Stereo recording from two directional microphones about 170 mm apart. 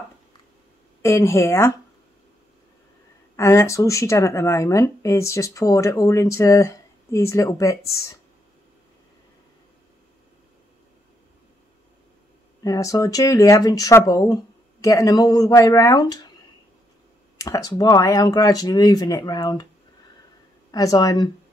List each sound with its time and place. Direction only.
1.0 s speech: 15° left (ahead or behind)
3.3 s speech: 15° left (ahead or behind)
12.6 s speech: 20° left (ahead or behind)
17.4 s speech: 20° left (ahead or behind)
20.7 s speech: 20° left (ahead or behind)